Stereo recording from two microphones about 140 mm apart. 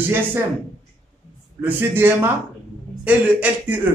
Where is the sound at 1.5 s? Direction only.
15° right (ahead or behind).